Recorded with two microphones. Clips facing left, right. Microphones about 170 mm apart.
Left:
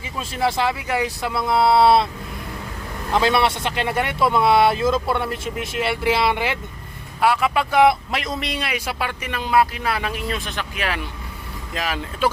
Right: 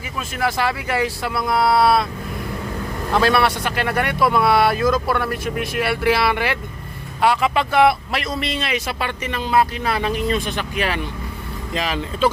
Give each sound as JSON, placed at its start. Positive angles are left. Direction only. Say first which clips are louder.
{"t": 0.2, "sound": "a man's voice", "louder": "even", "side_deg": 25}
{"t": 3.1, "sound": "a man's voice", "louder": "right 1 dB", "side_deg": 20}
{"t": 7.2, "sound": "speech", "louder": "right 1 dB", "side_deg": 5}